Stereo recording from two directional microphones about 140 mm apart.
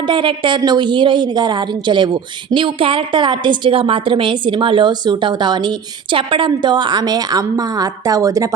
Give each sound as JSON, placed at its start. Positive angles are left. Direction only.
{"t": 0.1, "sound": "a woman's voice", "side_deg": -35}